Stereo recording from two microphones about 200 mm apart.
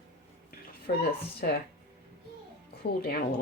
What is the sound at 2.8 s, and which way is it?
Speech, 50° left (ahead or behind).